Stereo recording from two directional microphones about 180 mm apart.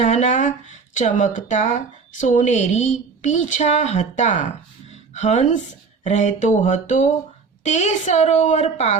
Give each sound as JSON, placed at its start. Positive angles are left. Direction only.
{"t": 0.0, "sound": "a woman's voice", "side_deg": 40}